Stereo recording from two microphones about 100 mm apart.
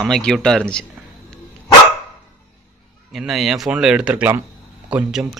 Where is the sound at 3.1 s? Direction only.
Centre (ahead or behind).